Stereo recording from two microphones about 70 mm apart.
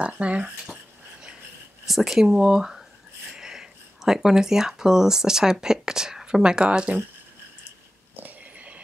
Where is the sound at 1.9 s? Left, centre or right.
Centre.